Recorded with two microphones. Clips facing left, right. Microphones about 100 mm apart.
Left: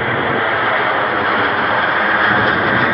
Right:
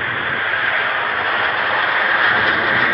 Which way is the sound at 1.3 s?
50° left (ahead or behind).